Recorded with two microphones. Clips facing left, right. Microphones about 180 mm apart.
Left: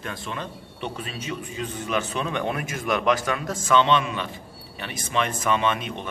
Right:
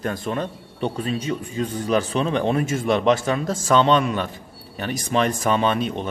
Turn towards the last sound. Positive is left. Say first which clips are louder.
# right 4 dB
turn(degrees=-35)  # may be behind; listen again after turning